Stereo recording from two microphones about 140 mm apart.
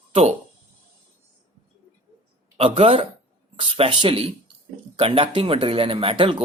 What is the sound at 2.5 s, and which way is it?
Speech, 45° right (ahead or behind).